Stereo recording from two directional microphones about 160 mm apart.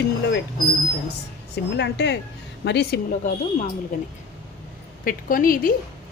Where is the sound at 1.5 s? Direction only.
90° left.